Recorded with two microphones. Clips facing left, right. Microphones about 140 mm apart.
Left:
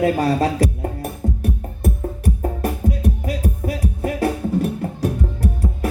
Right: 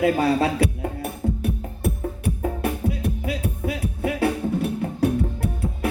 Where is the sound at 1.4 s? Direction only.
40° left (ahead or behind).